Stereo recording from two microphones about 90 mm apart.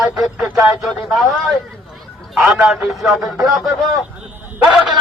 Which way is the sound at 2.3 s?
5° right (ahead or behind).